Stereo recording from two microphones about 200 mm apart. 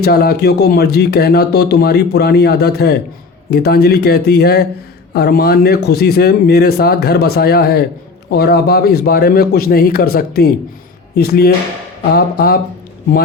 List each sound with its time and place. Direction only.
0.0 s speech: 50° left (ahead or behind)